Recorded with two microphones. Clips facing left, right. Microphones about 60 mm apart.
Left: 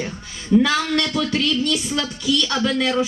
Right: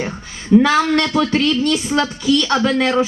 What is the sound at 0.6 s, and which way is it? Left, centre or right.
A woman's voice, right.